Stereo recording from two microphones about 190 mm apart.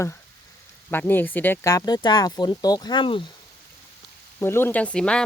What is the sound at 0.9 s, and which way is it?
Speech, 10° left (ahead or behind).